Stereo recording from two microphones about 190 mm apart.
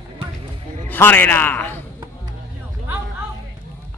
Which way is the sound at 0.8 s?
10° left (ahead or behind).